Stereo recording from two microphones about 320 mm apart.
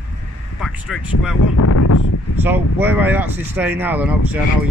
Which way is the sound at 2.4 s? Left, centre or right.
Centre.